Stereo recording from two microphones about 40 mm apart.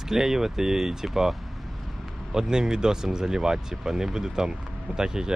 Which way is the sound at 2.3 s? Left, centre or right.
Centre.